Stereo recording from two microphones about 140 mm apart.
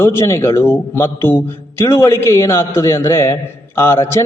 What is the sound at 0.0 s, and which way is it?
Speech, 20° left (ahead or behind).